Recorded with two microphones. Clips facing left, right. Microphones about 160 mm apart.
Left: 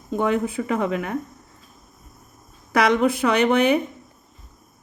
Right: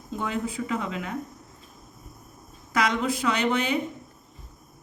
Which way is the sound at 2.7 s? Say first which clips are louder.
Left 7 dB; 60° left (ahead or behind).